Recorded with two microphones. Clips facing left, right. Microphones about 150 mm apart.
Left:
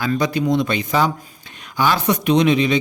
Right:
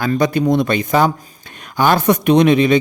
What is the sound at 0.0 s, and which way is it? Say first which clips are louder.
Speech: right 4 dB; 50° right (ahead or behind).